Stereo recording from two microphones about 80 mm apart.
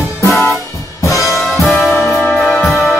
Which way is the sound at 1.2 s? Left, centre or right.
Centre.